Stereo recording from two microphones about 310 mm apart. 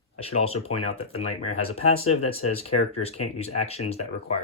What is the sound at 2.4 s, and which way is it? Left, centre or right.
Speech, left.